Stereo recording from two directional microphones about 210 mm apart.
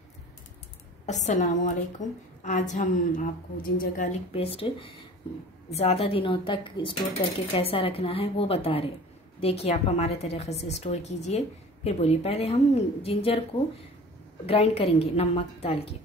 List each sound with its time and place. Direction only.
1.0 s a woman's voice: 35° left (ahead or behind)
14.4 s a woman's voice: 30° left (ahead or behind)